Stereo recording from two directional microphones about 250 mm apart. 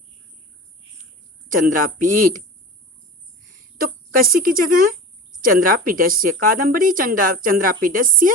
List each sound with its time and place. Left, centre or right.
1.5 s a woman's voice: right
3.8 s a woman's voice: right